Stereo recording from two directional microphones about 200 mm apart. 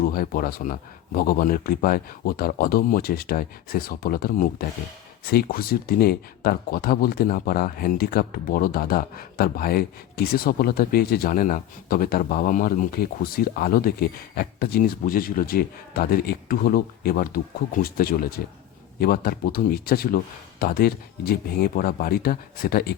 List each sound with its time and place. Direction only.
0.0 s speech: 45° left (ahead or behind)